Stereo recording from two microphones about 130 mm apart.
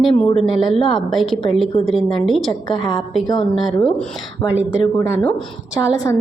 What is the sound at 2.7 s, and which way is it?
Speech, 40° left (ahead or behind).